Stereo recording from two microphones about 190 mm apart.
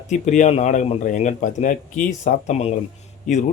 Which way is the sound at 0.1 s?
40° left (ahead or behind).